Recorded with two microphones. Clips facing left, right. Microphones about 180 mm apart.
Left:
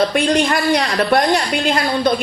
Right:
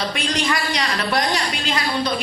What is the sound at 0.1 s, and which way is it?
A woman's voice, 55° left (ahead or behind).